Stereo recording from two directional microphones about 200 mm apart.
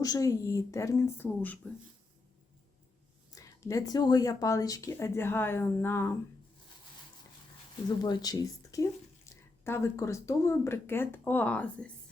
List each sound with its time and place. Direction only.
0.0 s speech: 15° left (ahead or behind)
3.3 s speech: 15° left (ahead or behind)
7.9 s speech: 20° left (ahead or behind)